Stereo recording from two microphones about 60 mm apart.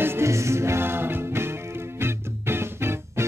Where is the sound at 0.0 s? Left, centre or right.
Right.